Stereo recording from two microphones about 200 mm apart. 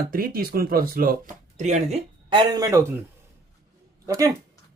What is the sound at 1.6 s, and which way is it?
Speech, 35° right (ahead or behind).